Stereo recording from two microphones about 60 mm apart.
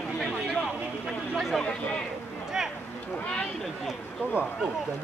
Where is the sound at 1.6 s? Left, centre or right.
Centre.